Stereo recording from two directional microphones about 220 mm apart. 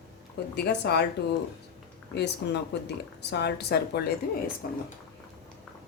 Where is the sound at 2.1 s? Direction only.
50° left (ahead or behind).